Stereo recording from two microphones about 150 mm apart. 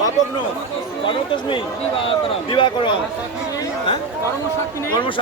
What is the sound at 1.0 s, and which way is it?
Speech, 35° left (ahead or behind).